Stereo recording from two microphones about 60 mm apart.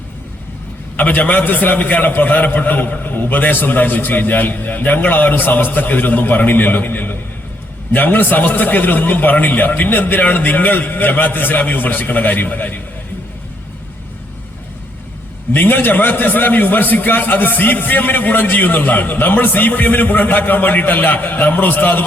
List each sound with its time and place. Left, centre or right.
0.9 s a man's voice: left
15.5 s a man's voice: left